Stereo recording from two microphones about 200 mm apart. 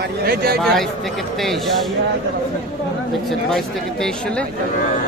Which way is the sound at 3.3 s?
Centre (ahead or behind).